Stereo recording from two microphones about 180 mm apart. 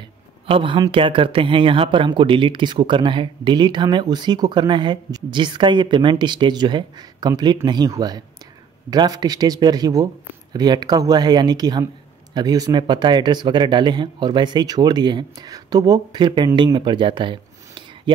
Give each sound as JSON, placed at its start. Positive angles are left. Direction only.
{"t": 0.5, "sound": "speech", "side_deg": -30}